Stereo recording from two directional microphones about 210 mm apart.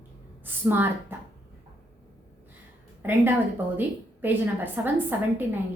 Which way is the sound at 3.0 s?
10° right (ahead or behind).